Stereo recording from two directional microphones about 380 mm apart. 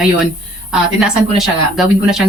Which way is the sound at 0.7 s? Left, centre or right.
Centre.